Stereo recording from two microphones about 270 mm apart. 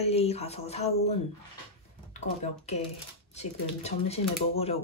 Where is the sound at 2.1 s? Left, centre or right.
Left.